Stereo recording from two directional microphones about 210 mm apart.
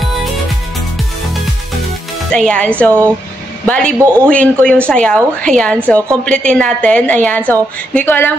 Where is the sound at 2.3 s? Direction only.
5° left (ahead or behind).